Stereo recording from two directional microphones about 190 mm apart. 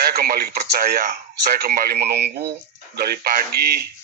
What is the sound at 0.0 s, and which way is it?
Speech, 55° right (ahead or behind).